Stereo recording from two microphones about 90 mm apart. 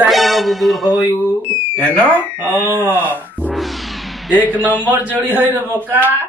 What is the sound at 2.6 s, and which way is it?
Speech, 25° right (ahead or behind).